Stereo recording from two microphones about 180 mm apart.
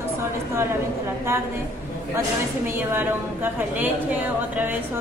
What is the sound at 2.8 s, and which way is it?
Speech, 10° right (ahead or behind).